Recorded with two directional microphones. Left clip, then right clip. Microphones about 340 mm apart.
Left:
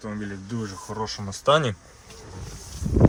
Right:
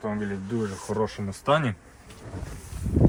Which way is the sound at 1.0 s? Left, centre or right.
Centre.